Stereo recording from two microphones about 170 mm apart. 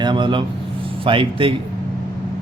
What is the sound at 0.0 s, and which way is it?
Speech, 25° right (ahead or behind).